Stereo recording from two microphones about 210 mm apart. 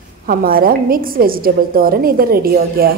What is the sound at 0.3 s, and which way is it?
A woman's voice, 45° right (ahead or behind).